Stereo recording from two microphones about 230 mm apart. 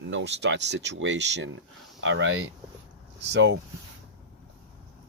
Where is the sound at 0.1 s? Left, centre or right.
Right.